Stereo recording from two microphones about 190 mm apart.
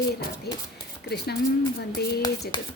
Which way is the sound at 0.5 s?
55° left (ahead or behind).